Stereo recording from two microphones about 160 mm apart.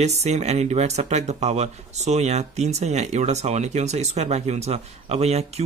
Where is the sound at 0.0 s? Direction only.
45° right (ahead or behind).